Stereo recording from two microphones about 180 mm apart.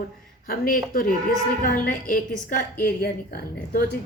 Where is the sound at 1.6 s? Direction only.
50° left (ahead or behind).